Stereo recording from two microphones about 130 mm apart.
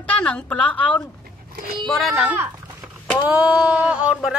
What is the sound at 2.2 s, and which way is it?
Speech, 15° right (ahead or behind).